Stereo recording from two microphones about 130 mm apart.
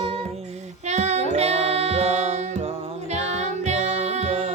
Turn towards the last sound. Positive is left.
turn(degrees=-50)  # may be behind; listen again after turning